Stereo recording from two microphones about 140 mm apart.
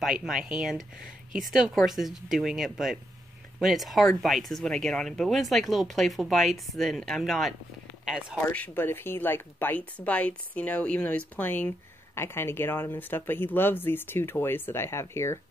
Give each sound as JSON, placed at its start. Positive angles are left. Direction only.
{"t": 0.0, "sound": "speech", "side_deg": -5}
{"t": 8.5, "sound": "speech", "side_deg": 15}